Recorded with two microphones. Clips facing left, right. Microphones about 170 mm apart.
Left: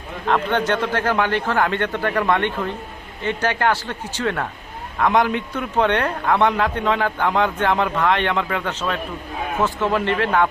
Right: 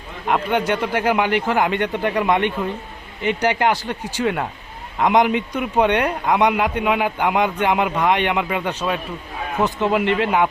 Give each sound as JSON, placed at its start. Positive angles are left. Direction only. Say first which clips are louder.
{"t": 0.3, "sound": "a man's voice", "louder": "even", "side_deg": -10}